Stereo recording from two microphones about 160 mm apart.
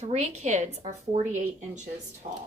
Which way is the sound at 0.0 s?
45° right (ahead or behind).